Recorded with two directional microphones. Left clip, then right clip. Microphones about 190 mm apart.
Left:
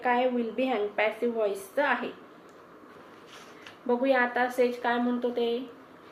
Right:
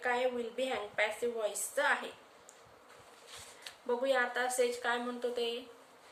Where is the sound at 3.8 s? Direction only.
40° right (ahead or behind).